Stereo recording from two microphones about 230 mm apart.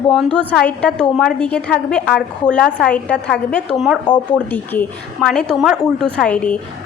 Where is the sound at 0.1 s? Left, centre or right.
Centre.